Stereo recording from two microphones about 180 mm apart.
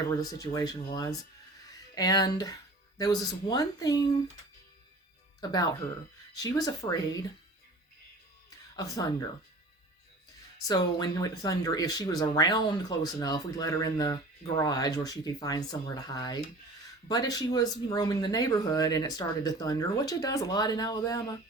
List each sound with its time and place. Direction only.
0.2 s speech: 20° left (ahead or behind)
5.4 s speech: 20° left (ahead or behind)
8.4 s music: 20° left (ahead or behind)
10.7 s speech: 20° left (ahead or behind)